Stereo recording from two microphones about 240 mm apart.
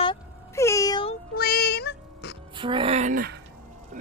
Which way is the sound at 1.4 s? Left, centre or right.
Left.